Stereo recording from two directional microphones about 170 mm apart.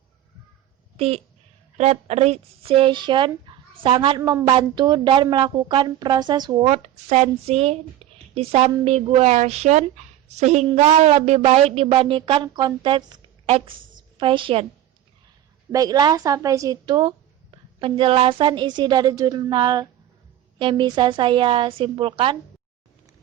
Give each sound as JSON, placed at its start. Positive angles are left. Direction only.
{"t": 0.9, "sound": "a woman's voice", "side_deg": -40}
{"t": 6.7, "sound": "a woman's voice", "side_deg": -40}
{"t": 15.7, "sound": "a woman's voice", "side_deg": -20}